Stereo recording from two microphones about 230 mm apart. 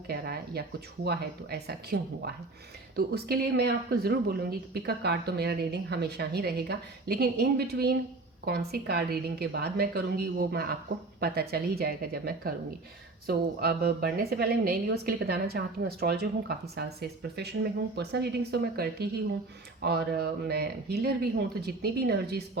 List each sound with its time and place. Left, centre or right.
0.1 s a woman's voice: right